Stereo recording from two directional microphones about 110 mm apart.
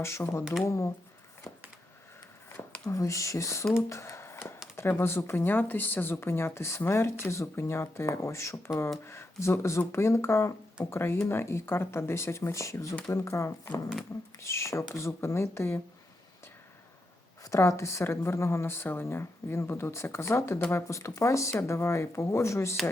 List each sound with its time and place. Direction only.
0.0 s speech: 25° left (ahead or behind)
2.8 s speech: 30° left (ahead or behind)
3.8 s a sound: 25° left (ahead or behind)
4.8 s speech: 20° left (ahead or behind)
17.4 s speech: 30° left (ahead or behind)